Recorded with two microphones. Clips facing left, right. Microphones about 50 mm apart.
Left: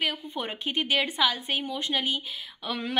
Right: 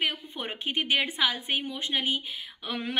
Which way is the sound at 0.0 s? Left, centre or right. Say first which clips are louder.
Left 1 dB; centre.